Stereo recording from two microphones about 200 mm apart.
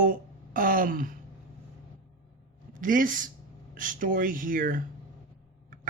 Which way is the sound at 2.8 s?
40° right (ahead or behind).